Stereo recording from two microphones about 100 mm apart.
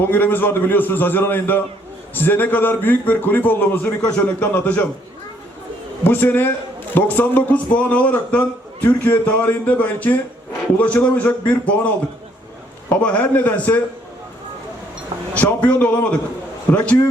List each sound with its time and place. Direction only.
0.0 s a man's voice: 20° left (ahead or behind)
6.1 s a man's voice: 20° left (ahead or behind)
15.4 s a man's voice: 15° left (ahead or behind)